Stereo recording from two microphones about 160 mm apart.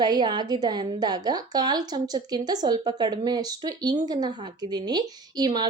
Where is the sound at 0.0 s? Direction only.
25° right (ahead or behind).